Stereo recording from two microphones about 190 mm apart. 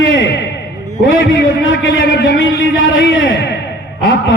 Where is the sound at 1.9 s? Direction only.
65° left (ahead or behind).